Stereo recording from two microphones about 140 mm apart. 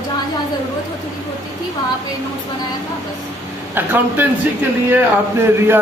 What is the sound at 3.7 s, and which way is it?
Speech, 15° right (ahead or behind).